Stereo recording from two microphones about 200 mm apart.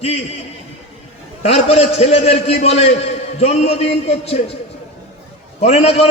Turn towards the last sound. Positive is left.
turn(degrees=30)  # may be behind; listen again after turning